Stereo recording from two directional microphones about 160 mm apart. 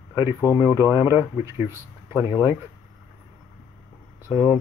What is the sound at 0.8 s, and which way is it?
Speech, 15° right (ahead or behind).